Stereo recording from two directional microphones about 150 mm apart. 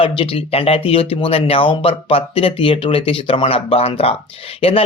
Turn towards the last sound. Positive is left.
turn(degrees=40)  # may be behind; listen again after turning